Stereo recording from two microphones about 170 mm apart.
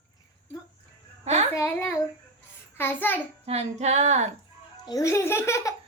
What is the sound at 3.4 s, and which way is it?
Music, 40° right (ahead or behind).